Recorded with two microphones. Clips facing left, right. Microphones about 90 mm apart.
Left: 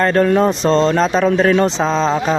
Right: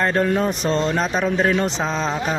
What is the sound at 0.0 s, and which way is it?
Speech, 90° left.